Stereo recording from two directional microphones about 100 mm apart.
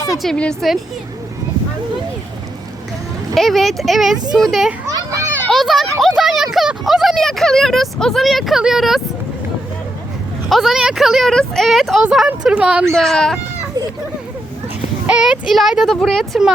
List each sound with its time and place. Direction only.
0.2 s speech: 5° left (ahead or behind)
3.3 s speech: centre (ahead or behind)
4.9 s children playing: 35° right (ahead or behind)
5.5 s speech: centre (ahead or behind)
10.5 s speech: centre (ahead or behind)
12.9 s speech: 5° left (ahead or behind)
15.0 s speech: 10° right (ahead or behind)